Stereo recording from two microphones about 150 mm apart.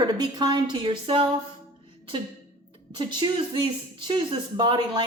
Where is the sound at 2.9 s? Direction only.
30° right (ahead or behind).